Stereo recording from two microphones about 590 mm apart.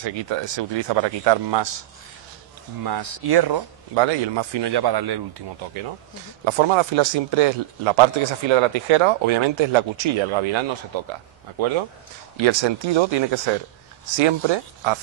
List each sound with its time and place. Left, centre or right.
0.0 s speech: right
2.8 s speech: right
6.4 s speech: right